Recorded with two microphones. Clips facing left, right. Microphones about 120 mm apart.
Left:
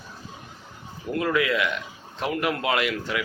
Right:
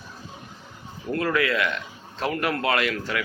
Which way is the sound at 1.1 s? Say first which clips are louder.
Even; 15° left (ahead or behind).